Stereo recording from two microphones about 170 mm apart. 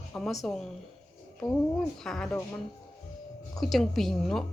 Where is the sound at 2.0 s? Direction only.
5° left (ahead or behind).